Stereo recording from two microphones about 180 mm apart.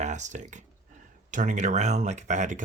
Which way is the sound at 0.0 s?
40° right (ahead or behind).